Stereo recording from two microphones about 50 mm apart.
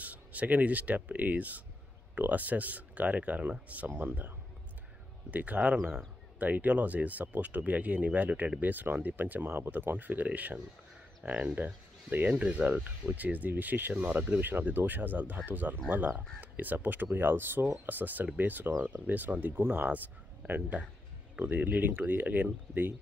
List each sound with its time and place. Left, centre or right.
0.0 s speech: right
5.3 s speech: right